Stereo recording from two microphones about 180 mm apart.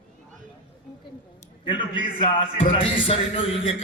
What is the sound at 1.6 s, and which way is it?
A man's voice, 25° left (ahead or behind).